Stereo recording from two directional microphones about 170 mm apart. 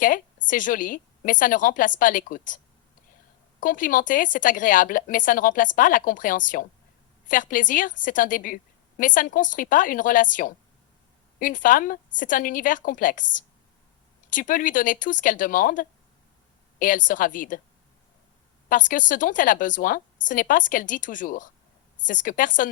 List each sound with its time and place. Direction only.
0.4 s a woman's voice: 50° left (ahead or behind)
3.6 s a woman's voice: 50° left (ahead or behind)
18.7 s a woman's voice: 50° left (ahead or behind)